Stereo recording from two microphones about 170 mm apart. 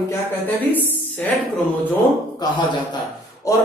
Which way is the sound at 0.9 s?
10° left (ahead or behind).